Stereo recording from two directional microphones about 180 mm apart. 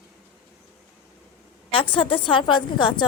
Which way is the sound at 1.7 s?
30° left (ahead or behind).